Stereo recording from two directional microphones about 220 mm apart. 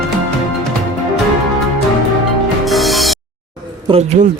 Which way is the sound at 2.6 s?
Centre (ahead or behind).